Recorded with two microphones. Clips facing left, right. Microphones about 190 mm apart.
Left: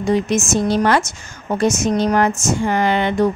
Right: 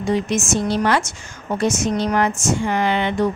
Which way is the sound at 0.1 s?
40° left (ahead or behind).